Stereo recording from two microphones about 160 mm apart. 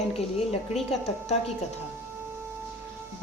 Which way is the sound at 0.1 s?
40° left (ahead or behind).